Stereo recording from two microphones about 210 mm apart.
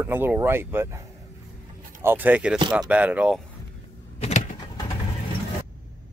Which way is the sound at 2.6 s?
20° right (ahead or behind).